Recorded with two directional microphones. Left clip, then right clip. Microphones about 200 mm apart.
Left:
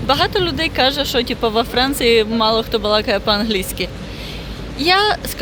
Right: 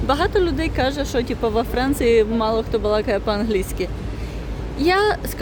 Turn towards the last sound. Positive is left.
turn(degrees=-15)  # may be behind; listen again after turning